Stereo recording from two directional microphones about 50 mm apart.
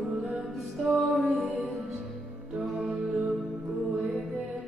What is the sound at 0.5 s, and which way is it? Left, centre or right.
Music, centre.